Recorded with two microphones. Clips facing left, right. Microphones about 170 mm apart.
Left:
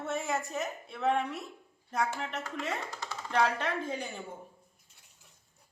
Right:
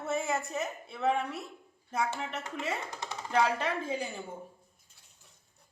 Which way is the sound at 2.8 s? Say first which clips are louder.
Right 1 dB; 20° right (ahead or behind).